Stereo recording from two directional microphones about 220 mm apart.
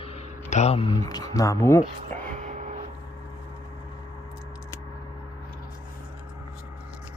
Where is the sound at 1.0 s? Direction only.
15° left (ahead or behind).